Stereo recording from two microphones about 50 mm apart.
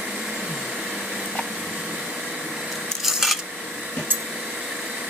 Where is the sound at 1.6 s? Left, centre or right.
Centre.